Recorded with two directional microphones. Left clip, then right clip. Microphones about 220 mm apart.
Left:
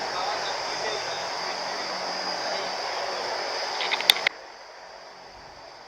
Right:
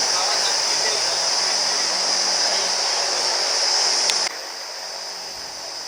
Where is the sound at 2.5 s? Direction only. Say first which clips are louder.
Right 8 dB; 5° left (ahead or behind).